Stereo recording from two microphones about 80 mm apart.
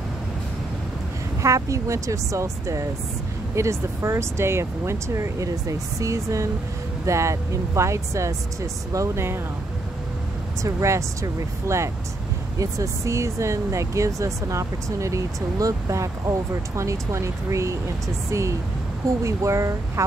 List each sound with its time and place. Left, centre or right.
1.4 s speech: right
10.6 s speech: right